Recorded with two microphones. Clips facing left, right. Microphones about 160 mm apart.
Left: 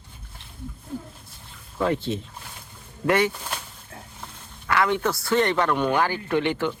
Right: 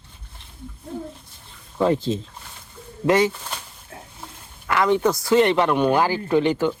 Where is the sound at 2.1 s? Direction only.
30° right (ahead or behind).